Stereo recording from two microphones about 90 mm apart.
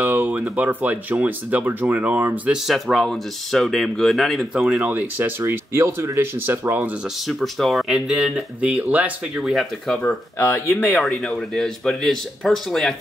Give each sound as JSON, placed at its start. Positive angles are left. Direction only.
{"t": 0.0, "sound": "speech", "side_deg": -20}
{"t": 2.5, "sound": "speech", "side_deg": 0}
{"t": 4.8, "sound": "speech", "side_deg": -20}
{"t": 7.2, "sound": "speech", "side_deg": 0}
{"t": 8.1, "sound": "speech", "side_deg": -10}
{"t": 9.4, "sound": "speech", "side_deg": 0}
{"t": 10.4, "sound": "speech", "side_deg": 30}
{"t": 11.0, "sound": "speech", "side_deg": 5}